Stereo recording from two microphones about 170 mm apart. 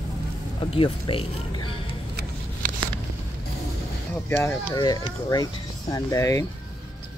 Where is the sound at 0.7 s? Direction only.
30° left (ahead or behind).